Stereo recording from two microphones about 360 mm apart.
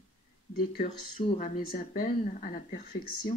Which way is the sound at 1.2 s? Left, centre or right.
Left.